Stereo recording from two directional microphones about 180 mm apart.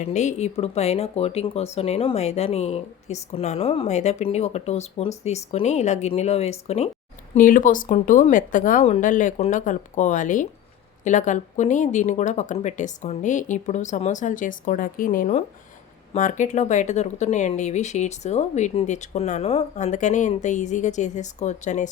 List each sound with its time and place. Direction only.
0.0 s speech: 40° left (ahead or behind)
7.3 s speech: 50° left (ahead or behind)